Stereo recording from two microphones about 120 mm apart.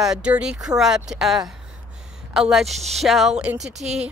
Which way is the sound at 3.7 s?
70° right (ahead or behind).